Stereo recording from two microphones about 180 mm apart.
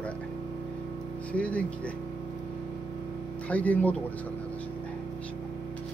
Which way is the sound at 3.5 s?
10° left (ahead or behind).